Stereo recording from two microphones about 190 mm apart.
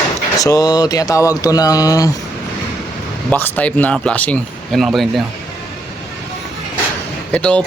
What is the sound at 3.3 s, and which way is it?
Speech, 10° left (ahead or behind).